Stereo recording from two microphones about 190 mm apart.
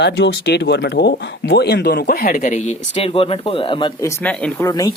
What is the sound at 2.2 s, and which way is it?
Speech, 40° left (ahead or behind).